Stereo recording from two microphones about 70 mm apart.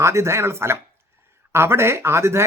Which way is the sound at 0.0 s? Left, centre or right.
Right.